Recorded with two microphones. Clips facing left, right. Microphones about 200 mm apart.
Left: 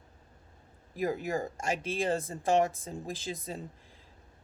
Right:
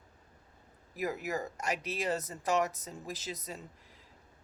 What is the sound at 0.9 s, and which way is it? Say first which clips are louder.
A woman's voice: left 4 dB; 30° left (ahead or behind).